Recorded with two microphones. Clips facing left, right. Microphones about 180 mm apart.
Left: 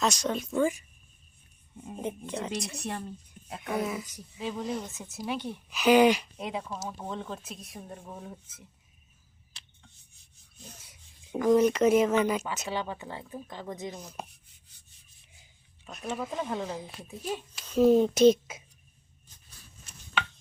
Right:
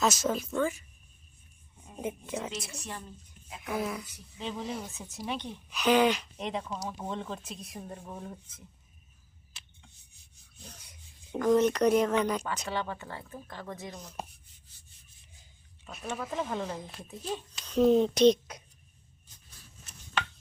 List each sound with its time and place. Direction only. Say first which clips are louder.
0.0 s speech: even; 5° right (ahead or behind)
0.5 s speech: left 3 dB; 15° left (ahead or behind)
2.0 s speech: left 1 dB; 5° right (ahead or behind)
3.7 s speech: left 2 dB; centre (ahead or behind)
11.3 s speech: left 2 dB; 5° left (ahead or behind)
13.9 s speech: left 1 dB; centre (ahead or behind)
15.9 s speech: left 2 dB; centre (ahead or behind)